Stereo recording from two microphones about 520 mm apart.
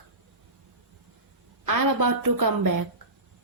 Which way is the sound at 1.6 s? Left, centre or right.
Right.